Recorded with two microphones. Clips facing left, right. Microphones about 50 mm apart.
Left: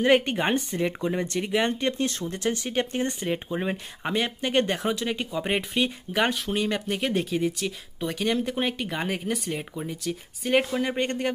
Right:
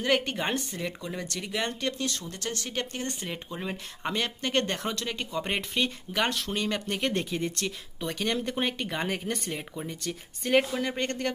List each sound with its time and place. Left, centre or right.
0.0 s speech: left